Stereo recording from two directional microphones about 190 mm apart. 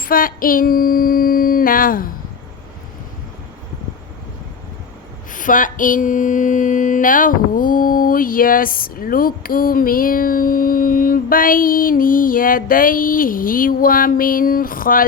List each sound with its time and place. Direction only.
0.0 s female singing: 50° left (ahead or behind)
5.3 s mantra: 45° left (ahead or behind)